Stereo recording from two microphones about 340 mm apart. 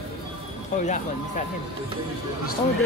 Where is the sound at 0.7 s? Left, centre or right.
Left.